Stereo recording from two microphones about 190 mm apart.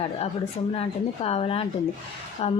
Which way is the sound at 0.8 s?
30° left (ahead or behind).